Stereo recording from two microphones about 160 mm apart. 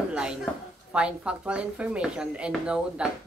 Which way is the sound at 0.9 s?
5° right (ahead or behind).